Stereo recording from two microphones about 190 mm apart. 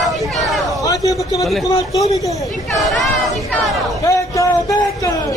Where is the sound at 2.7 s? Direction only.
Centre (ahead or behind).